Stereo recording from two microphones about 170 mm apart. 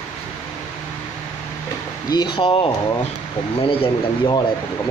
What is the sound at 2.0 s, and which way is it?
Speech, 25° left (ahead or behind).